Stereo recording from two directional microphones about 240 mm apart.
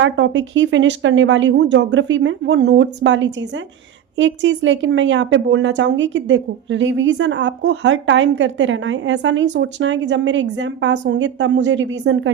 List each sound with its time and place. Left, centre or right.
0.0 s a woman's voice: right